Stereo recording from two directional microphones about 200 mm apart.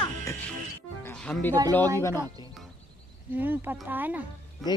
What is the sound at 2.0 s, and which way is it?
Speech, 15° left (ahead or behind).